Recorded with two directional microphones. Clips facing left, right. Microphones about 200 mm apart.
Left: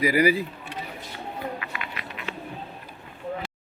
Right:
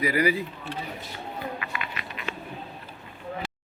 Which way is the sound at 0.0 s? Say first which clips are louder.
Left 3 dB; 10° left (ahead or behind).